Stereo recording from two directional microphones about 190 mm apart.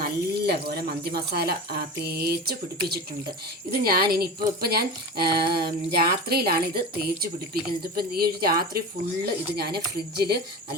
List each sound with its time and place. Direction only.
0.0 s speech: 55° right (ahead or behind)